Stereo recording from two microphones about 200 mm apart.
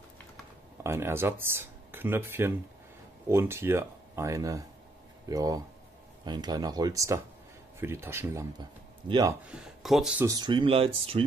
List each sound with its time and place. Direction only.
0.8 s speech: 15° right (ahead or behind)
9.5 s speech: centre (ahead or behind)
10.2 s speech: 20° right (ahead or behind)